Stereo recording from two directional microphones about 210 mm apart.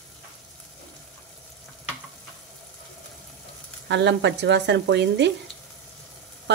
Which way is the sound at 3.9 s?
55° right (ahead or behind).